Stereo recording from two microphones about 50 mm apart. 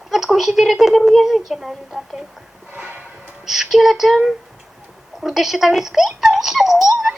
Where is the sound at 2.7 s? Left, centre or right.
Right.